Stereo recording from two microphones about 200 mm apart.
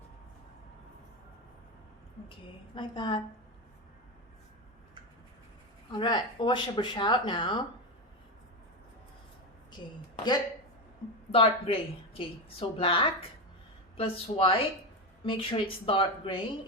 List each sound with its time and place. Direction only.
2.7 s a woman's voice: 25° left (ahead or behind)
6.0 s a woman's voice: 25° left (ahead or behind)
11.3 s a woman's voice: 30° left (ahead or behind)